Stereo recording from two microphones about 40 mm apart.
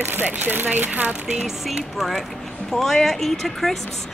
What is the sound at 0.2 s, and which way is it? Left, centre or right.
Speech, right.